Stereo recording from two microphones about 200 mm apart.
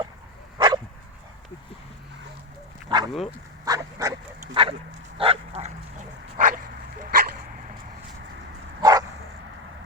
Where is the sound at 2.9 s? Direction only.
25° right (ahead or behind); by 7.4 s 45° right (ahead or behind).